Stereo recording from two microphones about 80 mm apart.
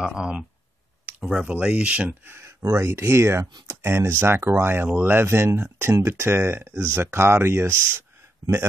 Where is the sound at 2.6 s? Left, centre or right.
Right.